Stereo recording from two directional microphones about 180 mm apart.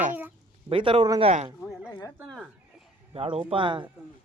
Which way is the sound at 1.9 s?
20° left (ahead or behind).